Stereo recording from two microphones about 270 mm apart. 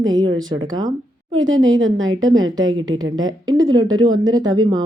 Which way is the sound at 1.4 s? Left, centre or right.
Right.